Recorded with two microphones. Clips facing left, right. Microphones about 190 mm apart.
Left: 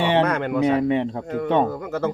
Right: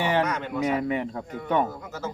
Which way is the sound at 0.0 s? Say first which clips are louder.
Left 5 dB; 25° left (ahead or behind).